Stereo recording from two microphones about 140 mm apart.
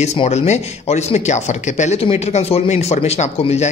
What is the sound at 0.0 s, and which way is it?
Speech, 50° left (ahead or behind).